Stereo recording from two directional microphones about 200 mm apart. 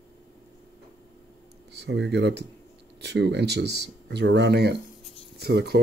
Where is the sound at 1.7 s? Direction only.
60° right (ahead or behind).